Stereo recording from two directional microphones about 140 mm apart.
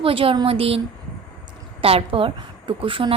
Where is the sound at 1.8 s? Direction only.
45° right (ahead or behind).